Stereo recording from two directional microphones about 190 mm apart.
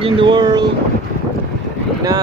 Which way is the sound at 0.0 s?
25° right (ahead or behind).